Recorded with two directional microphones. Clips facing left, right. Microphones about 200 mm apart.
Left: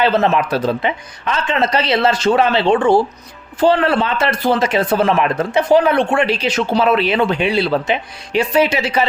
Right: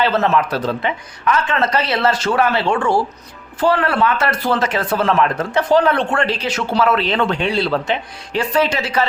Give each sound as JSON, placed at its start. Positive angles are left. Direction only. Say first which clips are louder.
{"t": 0.0, "sound": "a man's voice", "louder": "left 2 dB", "side_deg": 20}